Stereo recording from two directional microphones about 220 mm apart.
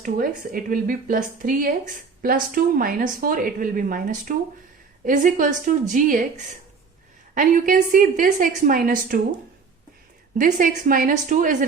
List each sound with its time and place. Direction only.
0.0 s speech: 40° right (ahead or behind)
10.3 s speech: 40° right (ahead or behind)